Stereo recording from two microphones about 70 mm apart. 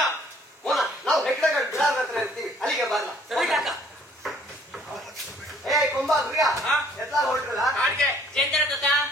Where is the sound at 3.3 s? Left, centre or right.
Centre.